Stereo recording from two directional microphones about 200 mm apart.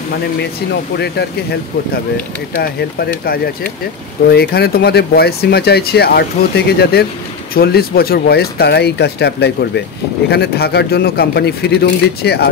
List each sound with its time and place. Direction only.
0.9 s speech: 55° left (ahead or behind)